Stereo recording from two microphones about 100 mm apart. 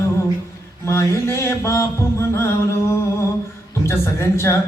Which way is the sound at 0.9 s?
30° left (ahead or behind).